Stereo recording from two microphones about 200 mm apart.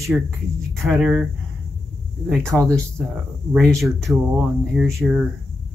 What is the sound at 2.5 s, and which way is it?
Speech, 5° right (ahead or behind).